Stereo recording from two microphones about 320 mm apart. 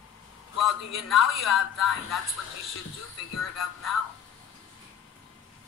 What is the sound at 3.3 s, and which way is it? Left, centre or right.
Speech, left.